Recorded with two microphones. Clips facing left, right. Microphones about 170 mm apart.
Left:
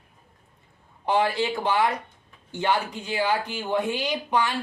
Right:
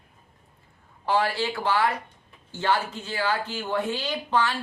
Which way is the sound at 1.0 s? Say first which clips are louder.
Left 2 dB; 20° left (ahead or behind).